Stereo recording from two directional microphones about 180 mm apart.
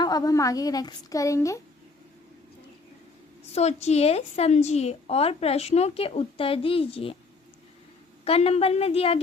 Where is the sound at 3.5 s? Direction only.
35° left (ahead or behind).